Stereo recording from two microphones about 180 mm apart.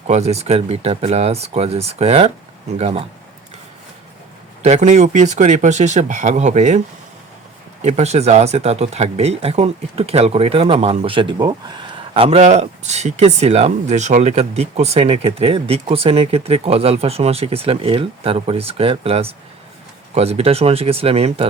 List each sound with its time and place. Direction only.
0.1 s speech: 35° right (ahead or behind)
4.6 s speech: 40° right (ahead or behind)
7.9 s speech: 40° right (ahead or behind)